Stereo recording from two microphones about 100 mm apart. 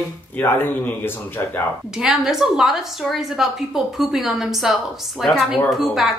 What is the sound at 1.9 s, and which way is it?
A woman's voice, 5° right (ahead or behind).